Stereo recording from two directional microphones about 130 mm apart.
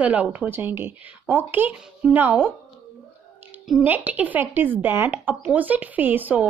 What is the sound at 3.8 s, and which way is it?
Speech, 15° right (ahead or behind).